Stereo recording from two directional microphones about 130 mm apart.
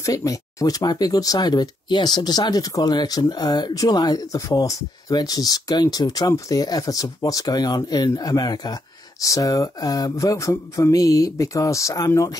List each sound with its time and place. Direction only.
0.0 s speech: 25° left (ahead or behind)